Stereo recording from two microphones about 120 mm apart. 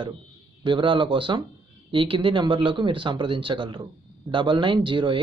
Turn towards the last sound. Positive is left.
turn(degrees=-40)  # may be behind; listen again after turning